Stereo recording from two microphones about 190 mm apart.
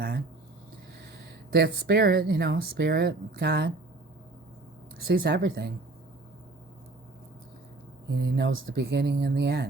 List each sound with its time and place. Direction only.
1.5 s speech: 55° right (ahead or behind)
4.9 s speech: 55° right (ahead or behind)
8.1 s speech: 60° right (ahead or behind)